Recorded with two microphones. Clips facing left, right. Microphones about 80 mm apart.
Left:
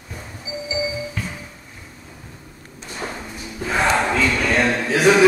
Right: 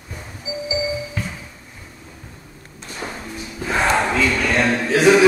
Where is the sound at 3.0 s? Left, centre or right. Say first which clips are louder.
Left 1 dB; left.